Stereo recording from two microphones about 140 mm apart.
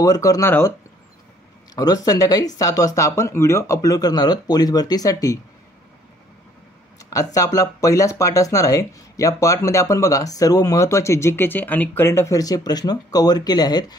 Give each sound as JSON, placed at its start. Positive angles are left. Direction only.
{"t": 0.0, "sound": "speech", "side_deg": 25}
{"t": 1.8, "sound": "speech", "side_deg": 25}
{"t": 7.0, "sound": "a sound", "side_deg": 25}
{"t": 7.3, "sound": "speech", "side_deg": 25}